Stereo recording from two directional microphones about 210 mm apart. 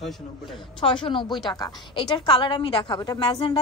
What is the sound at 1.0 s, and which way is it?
A woman's voice, 20° left (ahead or behind).